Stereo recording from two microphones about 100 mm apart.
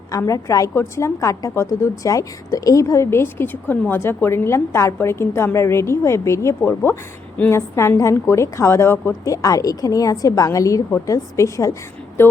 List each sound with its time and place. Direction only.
0.1 s a woman's voice: 35° left (ahead or behind)